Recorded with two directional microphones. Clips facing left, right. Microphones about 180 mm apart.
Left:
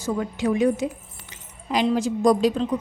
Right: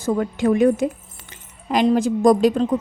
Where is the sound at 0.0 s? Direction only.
55° right (ahead or behind).